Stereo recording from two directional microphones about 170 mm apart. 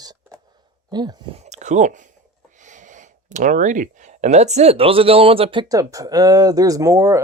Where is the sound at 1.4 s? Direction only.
45° right (ahead or behind).